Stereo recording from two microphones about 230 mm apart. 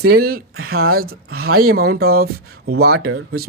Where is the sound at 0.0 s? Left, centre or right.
Right.